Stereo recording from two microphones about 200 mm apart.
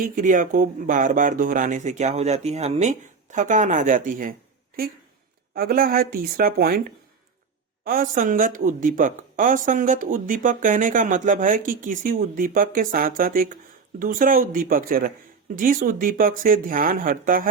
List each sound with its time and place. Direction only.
0.0 s speech: 40° right (ahead or behind)
5.5 s speech: 45° right (ahead or behind)